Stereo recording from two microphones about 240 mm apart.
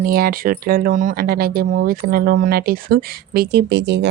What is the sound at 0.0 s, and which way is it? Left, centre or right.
Speech, right.